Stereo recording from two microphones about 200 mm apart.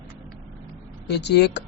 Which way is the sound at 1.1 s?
55° left (ahead or behind).